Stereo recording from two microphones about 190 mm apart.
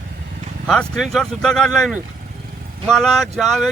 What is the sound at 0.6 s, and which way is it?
Speech, centre (ahead or behind).